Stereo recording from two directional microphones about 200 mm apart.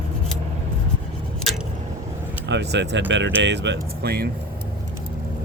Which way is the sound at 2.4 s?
60° right (ahead or behind).